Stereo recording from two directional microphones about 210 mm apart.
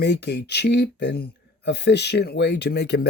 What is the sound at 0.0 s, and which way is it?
Speech, 55° left (ahead or behind).